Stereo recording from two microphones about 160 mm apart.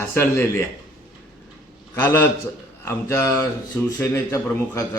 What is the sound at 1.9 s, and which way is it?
A man's voice, 15° left (ahead or behind).